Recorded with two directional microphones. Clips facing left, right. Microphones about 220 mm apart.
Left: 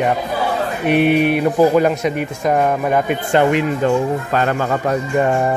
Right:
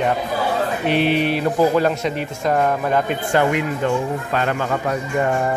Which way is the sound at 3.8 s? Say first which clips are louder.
Left 4 dB; 35° left (ahead or behind).